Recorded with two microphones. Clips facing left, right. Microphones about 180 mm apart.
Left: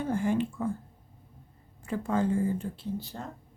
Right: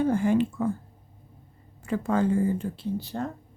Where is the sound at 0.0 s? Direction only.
85° right.